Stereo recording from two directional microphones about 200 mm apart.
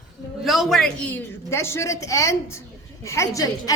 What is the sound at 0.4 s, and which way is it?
A woman's voice, centre (ahead or behind).